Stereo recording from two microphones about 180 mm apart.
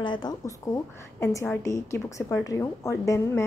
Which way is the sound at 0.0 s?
25° left (ahead or behind).